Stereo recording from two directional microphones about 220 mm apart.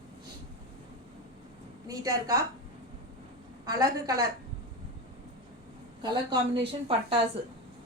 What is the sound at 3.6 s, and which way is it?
Speech, 15° right (ahead or behind).